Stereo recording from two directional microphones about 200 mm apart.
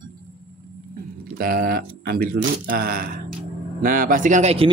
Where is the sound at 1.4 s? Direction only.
45° right (ahead or behind).